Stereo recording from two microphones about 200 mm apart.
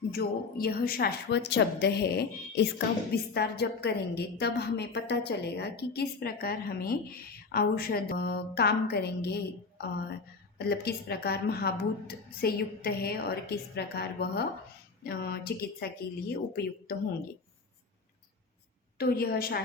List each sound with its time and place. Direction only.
0.1 s a woman's voice: 50° left (ahead or behind)
18.9 s a woman's voice: 50° left (ahead or behind)